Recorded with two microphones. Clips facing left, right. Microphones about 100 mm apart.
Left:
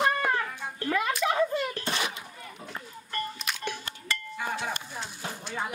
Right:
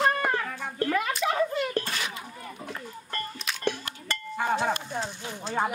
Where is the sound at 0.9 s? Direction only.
Centre (ahead or behind).